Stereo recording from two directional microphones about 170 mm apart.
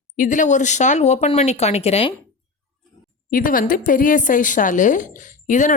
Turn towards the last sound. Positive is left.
turn(degrees=50)  # may be behind; listen again after turning